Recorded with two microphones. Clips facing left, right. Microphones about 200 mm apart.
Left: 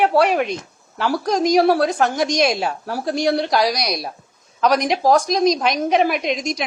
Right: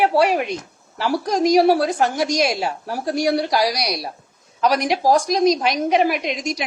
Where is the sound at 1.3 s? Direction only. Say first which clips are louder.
Right 1 dB; 10° right (ahead or behind).